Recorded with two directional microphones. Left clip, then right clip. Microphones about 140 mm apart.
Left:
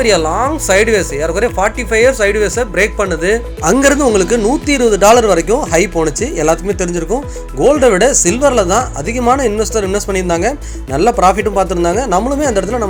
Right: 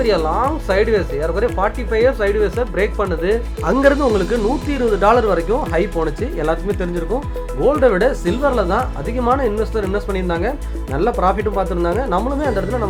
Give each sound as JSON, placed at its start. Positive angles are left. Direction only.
{"t": 0.0, "sound": "speech", "side_deg": 25}
{"t": 3.6, "sound": "speech", "side_deg": 40}